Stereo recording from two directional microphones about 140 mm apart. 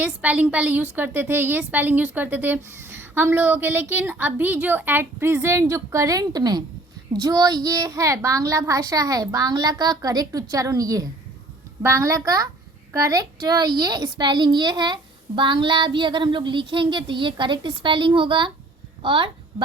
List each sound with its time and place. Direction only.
0.0 s a woman's voice: 10° right (ahead or behind); by 19.6 s 35° right (ahead or behind)